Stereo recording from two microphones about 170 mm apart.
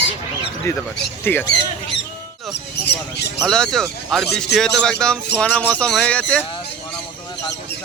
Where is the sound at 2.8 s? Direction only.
80° left.